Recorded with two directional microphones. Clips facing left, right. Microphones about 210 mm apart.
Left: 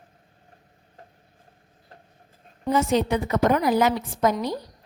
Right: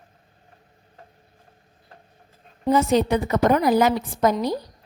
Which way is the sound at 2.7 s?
35° right (ahead or behind).